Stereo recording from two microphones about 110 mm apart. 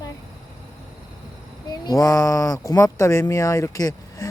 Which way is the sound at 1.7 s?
35° left (ahead or behind).